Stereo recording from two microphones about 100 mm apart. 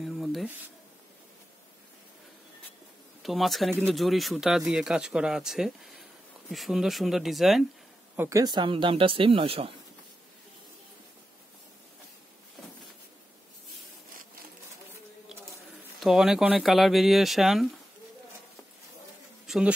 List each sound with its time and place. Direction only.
0.0 s a sound: centre (ahead or behind)
3.2 s speech: centre (ahead or behind)
8.2 s a woman's voice: 30° right (ahead or behind)
8.5 s speech: 50° right (ahead or behind)
16.0 s speech: 5° right (ahead or behind)
19.4 s bee: 5° right (ahead or behind)